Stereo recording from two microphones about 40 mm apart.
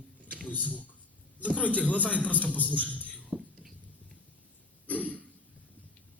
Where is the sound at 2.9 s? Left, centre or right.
Left.